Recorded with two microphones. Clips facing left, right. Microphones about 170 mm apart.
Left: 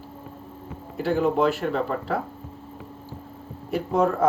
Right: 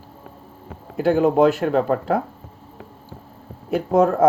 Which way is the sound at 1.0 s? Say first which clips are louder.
Right 6 dB; 45° right (ahead or behind).